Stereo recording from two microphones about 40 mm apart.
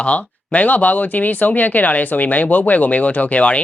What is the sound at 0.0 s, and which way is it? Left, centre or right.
Speech, left.